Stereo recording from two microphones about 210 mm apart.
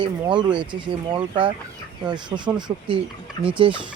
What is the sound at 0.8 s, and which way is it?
Speech, 25° right (ahead or behind).